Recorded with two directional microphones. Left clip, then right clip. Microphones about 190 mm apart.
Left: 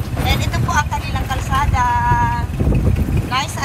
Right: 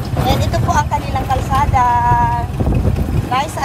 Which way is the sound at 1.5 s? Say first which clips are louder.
Right 3 dB; 45° right (ahead or behind).